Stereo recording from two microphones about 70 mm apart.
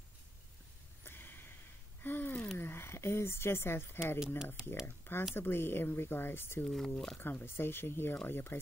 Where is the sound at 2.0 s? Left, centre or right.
Left.